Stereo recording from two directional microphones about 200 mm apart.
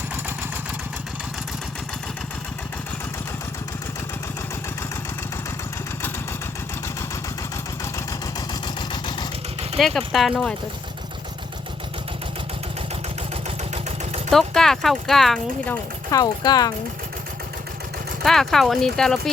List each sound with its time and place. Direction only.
8.6 s vehicle: 20° left (ahead or behind)
9.7 s speech: centre (ahead or behind)
14.3 s speech: centre (ahead or behind); by 16.7 s 20° left (ahead or behind)
18.2 s speech: centre (ahead or behind)